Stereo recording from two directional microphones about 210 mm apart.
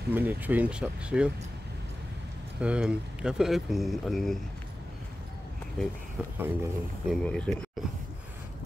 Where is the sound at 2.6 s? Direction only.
5° right (ahead or behind).